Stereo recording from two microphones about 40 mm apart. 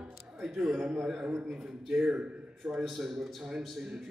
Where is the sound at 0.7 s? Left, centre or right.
Centre.